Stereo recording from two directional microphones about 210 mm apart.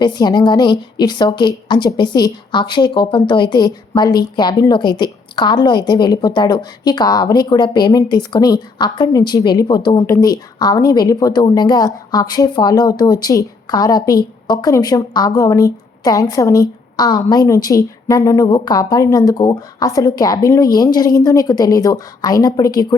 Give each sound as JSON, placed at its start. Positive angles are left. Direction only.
{"t": 0.0, "sound": "a woman's voice", "side_deg": 20}